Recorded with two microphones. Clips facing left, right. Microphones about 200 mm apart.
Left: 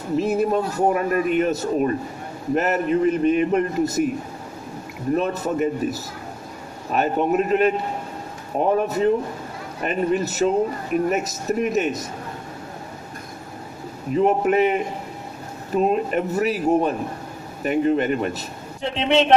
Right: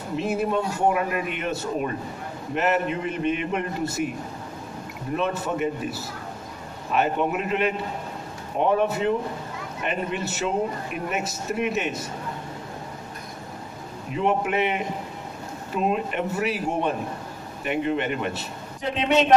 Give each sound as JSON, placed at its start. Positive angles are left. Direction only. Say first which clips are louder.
{"t": 0.2, "sound": "a man's voice", "louder": "left 3 dB", "side_deg": 40}
{"t": 5.1, "sound": "a man's voice", "louder": "left 4 dB", "side_deg": 40}
{"t": 14.1, "sound": "a man's voice", "louder": "left 6 dB", "side_deg": 40}